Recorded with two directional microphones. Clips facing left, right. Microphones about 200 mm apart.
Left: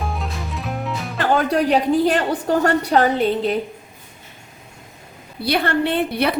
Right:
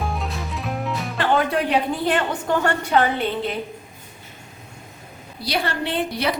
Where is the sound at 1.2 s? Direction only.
40° left (ahead or behind).